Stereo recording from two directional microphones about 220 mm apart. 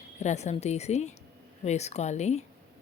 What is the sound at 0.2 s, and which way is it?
A woman's voice, 30° left (ahead or behind).